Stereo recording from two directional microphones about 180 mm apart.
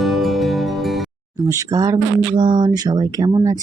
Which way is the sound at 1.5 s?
20° right (ahead or behind).